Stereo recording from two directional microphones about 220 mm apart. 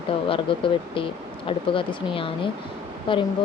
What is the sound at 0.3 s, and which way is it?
Speech, 25° left (ahead or behind).